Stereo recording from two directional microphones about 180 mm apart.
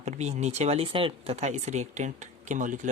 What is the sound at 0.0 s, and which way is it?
Speech, 40° right (ahead or behind).